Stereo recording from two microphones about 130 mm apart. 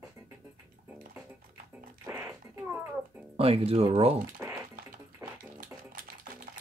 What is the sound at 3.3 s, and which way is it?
Speech, 50° right (ahead or behind).